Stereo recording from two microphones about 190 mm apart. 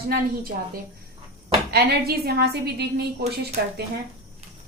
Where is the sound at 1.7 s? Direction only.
55° right (ahead or behind).